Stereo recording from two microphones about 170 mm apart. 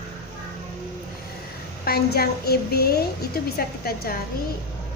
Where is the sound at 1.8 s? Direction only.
65° left (ahead or behind).